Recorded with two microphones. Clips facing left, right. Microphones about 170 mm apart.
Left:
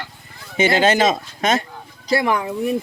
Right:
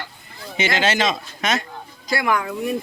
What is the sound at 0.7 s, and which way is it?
Speech, 45° left (ahead or behind).